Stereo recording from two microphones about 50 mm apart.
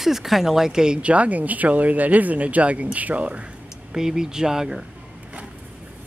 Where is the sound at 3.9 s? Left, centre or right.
Centre.